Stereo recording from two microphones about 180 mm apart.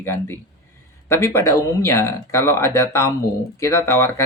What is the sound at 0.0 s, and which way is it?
Speech, 15° left (ahead or behind).